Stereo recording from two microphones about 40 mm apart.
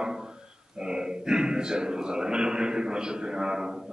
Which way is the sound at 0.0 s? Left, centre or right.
Centre.